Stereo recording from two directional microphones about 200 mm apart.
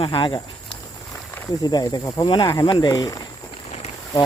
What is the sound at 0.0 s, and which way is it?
Speech, 25° left (ahead or behind).